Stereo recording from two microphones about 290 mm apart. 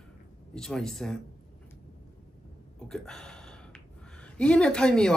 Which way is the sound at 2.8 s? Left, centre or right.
Centre.